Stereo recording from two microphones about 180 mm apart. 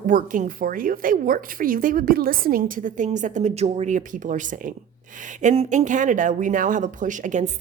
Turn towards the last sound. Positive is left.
turn(degrees=-40)  # may be behind; listen again after turning